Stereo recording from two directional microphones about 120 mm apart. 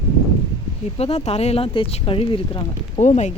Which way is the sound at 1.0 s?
60° left (ahead or behind).